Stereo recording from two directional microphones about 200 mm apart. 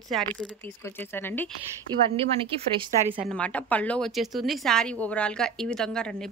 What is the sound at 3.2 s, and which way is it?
A woman's voice, 5° left (ahead or behind).